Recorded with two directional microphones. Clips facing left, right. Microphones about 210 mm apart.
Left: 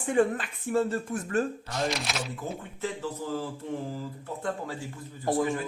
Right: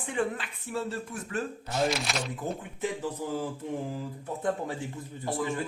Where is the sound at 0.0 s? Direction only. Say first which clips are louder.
Left 6 dB; 45° left (ahead or behind).